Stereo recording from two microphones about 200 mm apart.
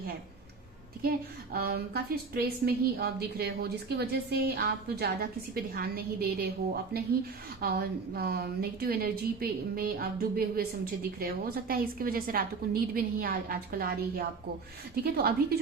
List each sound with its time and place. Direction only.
1.5 s a woman's voice: 50° right (ahead or behind)
7.6 s a woman's voice: 50° right (ahead or behind)